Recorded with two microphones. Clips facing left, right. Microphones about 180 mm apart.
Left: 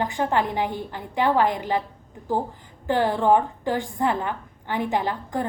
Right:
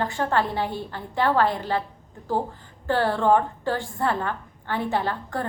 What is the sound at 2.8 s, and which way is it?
A woman's voice, 15° left (ahead or behind).